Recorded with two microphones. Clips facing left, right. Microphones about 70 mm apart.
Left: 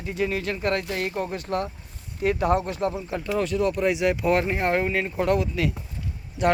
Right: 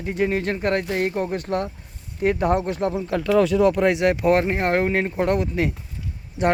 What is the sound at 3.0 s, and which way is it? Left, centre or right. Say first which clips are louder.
Speech: right 7 dB; right.